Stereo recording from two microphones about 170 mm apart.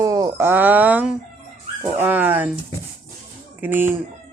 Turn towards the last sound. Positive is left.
turn(degrees=-10)  # may be behind; listen again after turning